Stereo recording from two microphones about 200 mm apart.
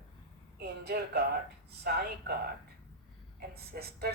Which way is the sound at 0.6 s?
50° right (ahead or behind).